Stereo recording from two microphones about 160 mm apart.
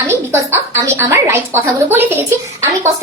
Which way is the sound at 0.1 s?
15° right (ahead or behind).